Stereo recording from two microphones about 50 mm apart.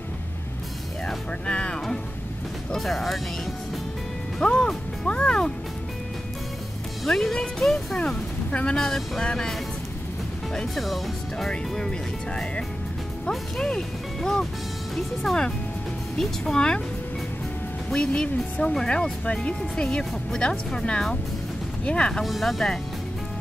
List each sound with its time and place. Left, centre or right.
1.0 s music: left
2.7 s speech: centre
4.4 s music: centre
7.1 s speech: centre
8.5 s speech: left
8.7 s speech: centre
10.7 s speech: centre
11.5 s speech: centre
16.2 s speech: centre
17.9 s speech: centre
22.2 s speech: centre